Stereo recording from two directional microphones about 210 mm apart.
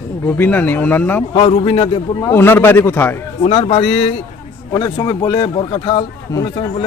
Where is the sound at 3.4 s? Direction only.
25° left (ahead or behind).